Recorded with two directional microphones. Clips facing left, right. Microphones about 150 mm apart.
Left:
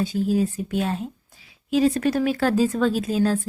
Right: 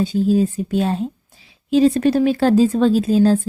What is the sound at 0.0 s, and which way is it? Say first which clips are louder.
A woman's voice: right 5 dB; 25° right (ahead or behind).